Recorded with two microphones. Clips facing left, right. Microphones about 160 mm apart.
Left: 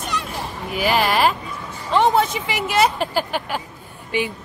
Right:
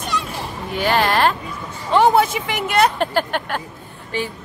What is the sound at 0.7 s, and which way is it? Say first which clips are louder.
Speech: right 1 dB; 5° left (ahead or behind).